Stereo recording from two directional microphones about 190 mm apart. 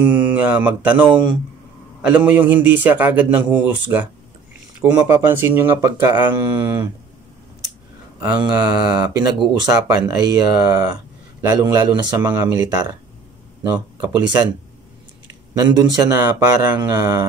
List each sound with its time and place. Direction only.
0.0 s a man's voice: 10° right (ahead or behind)
8.2 s a man's voice: 20° right (ahead or behind)
15.5 s a man's voice: 20° right (ahead or behind)